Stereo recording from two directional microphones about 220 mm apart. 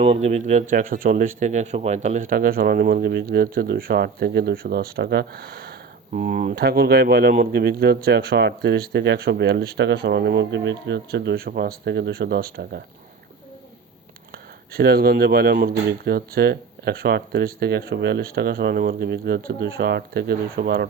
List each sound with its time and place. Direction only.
0.0 s speech: 30° right (ahead or behind)
14.7 s speech: 45° right (ahead or behind)